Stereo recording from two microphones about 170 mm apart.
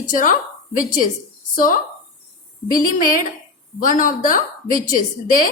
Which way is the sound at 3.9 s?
50° left (ahead or behind).